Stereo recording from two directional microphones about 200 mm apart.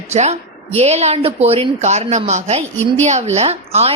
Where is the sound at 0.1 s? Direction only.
35° right (ahead or behind).